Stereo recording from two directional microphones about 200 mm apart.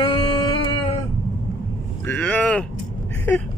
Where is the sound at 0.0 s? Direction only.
25° left (ahead or behind).